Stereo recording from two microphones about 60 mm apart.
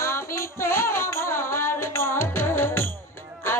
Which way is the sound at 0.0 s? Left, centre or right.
Left.